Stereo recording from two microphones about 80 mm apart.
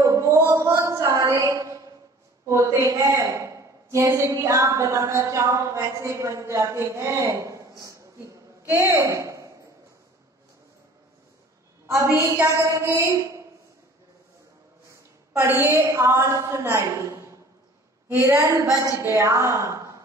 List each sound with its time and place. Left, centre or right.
0.0 s a sound: right
2.4 s a man's voice: right
11.8 s a sound: right
12.2 s a man's voice: right
15.3 s a woman's voice: right
15.7 s a man's voice: right